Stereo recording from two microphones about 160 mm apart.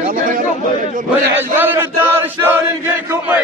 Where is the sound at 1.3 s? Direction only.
15° right (ahead or behind).